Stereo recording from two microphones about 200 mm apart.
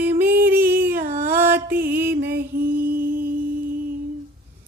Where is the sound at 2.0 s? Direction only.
50° right (ahead or behind).